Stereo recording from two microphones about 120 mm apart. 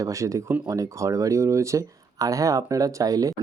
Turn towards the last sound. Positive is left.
turn(degrees=-30)  # may be behind; listen again after turning